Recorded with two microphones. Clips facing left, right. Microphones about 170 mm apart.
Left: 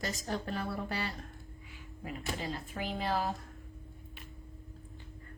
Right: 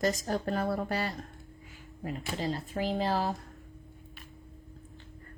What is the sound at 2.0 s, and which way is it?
A woman's voice, 35° right (ahead or behind).